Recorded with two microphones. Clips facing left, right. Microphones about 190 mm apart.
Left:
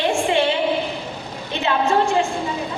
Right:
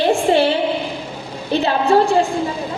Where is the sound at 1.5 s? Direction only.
35° right (ahead or behind).